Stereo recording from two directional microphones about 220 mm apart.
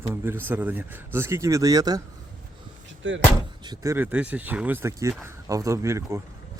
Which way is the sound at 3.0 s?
60° right (ahead or behind).